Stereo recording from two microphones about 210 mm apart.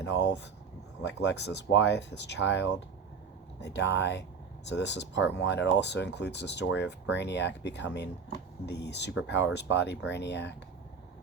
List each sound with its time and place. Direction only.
0.0 s speech: 55° left (ahead or behind)